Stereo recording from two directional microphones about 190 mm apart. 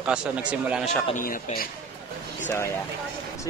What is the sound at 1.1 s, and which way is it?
Speech, 50° left (ahead or behind).